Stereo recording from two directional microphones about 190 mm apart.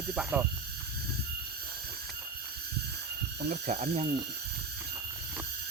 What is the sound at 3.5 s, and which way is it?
Speech, 40° right (ahead or behind).